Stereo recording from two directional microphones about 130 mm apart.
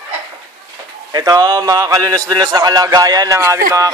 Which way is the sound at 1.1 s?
25° right (ahead or behind).